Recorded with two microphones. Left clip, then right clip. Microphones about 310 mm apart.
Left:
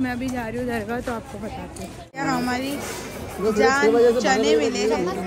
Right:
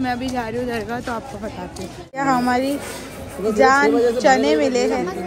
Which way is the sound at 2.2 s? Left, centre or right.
Centre.